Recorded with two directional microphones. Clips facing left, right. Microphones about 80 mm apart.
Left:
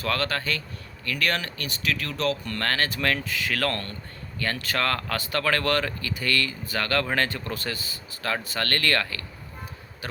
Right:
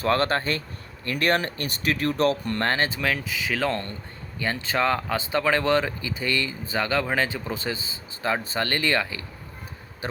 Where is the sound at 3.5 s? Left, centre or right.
Centre.